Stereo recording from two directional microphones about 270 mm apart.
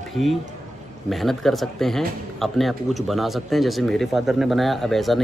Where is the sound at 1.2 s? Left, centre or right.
Centre.